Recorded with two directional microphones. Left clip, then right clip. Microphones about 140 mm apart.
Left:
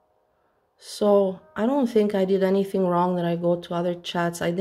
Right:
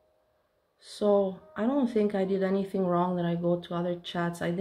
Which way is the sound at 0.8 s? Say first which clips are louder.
Left 5 dB; 55° left (ahead or behind).